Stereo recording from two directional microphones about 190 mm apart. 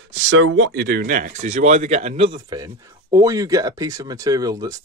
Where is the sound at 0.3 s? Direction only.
90° right.